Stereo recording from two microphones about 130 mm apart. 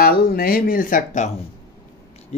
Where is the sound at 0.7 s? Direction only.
90° left.